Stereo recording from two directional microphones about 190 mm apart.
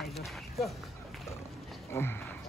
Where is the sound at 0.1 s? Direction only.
Centre (ahead or behind).